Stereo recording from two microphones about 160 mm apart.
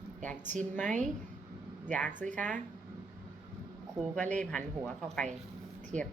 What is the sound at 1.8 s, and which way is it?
Speech, 10° left (ahead or behind).